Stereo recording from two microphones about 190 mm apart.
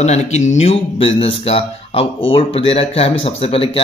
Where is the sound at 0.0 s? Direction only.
35° left (ahead or behind).